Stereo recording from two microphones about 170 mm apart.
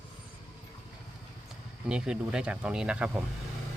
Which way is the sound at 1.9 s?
5° right (ahead or behind).